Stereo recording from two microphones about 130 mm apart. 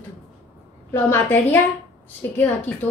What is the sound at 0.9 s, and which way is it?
Speech, 15° left (ahead or behind).